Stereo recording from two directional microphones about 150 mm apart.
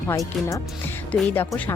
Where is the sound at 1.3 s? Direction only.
15° left (ahead or behind).